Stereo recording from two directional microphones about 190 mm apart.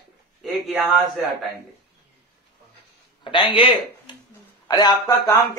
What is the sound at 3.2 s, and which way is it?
Speech, 25° left (ahead or behind).